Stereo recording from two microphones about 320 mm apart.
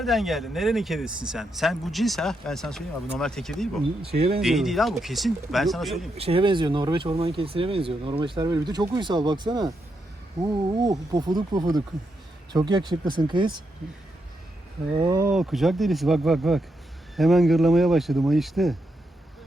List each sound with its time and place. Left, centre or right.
0.0 s speech: centre
4.0 s speech: centre
4.4 s speech: centre
6.1 s speech: centre
14.9 s speech: centre
15.3 s speech: centre